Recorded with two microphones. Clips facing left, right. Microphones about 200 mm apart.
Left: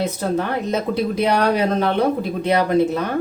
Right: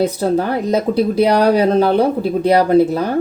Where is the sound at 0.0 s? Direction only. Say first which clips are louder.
Right 5 dB; 35° right (ahead or behind).